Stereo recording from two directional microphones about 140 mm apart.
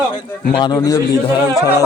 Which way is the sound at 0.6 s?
30° left (ahead or behind).